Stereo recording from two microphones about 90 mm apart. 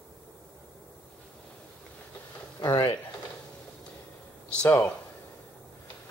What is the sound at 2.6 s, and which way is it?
Speech, 55° left (ahead or behind).